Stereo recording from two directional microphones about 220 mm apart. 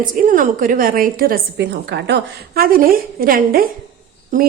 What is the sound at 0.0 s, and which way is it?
A woman's voice, 40° right (ahead or behind).